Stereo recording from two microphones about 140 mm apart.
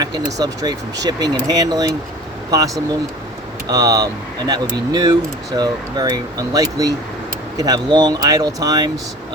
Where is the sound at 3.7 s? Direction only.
25° right (ahead or behind).